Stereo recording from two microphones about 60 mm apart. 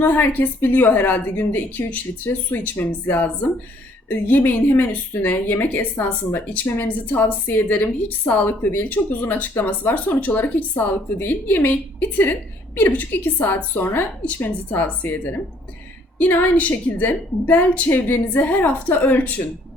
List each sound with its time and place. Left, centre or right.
0.0 s a woman's voice: left